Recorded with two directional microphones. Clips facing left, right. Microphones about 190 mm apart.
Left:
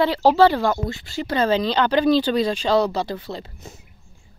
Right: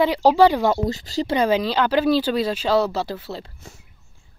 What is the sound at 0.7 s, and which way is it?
Speech, 40° right (ahead or behind).